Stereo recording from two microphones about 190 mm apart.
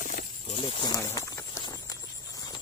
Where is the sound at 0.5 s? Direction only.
30° left (ahead or behind).